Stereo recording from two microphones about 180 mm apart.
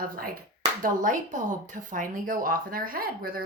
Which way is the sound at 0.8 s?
45° right (ahead or behind).